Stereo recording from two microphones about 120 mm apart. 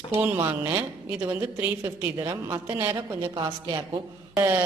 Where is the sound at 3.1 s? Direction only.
40° right (ahead or behind).